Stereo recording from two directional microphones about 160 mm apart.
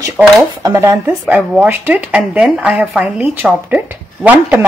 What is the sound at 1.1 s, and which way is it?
Speech, 5° right (ahead or behind).